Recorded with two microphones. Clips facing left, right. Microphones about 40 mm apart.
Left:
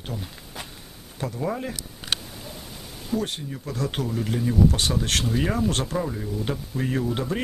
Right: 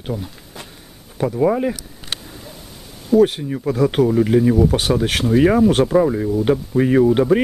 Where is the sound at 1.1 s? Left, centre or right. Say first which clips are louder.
Right 11 dB; centre.